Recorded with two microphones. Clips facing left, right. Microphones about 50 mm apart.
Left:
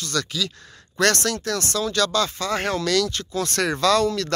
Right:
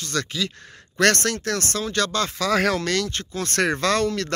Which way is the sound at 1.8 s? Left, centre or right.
Right.